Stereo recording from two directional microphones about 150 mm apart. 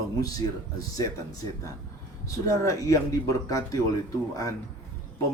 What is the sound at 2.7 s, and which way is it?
Speech, 20° left (ahead or behind).